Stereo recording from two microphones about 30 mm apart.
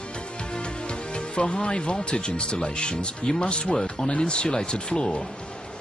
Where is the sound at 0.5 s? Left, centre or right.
Left.